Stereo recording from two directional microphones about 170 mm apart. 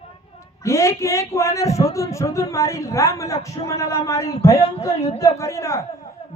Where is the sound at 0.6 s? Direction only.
15° left (ahead or behind).